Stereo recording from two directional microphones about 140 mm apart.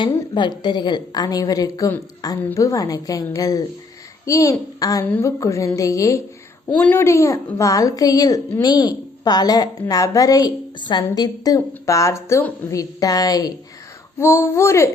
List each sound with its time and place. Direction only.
0.0 s a woman's voice: 35° left (ahead or behind)
2.4 s a woman's voice: 15° left (ahead or behind)
2.6 s a woman's voice: 25° left (ahead or behind)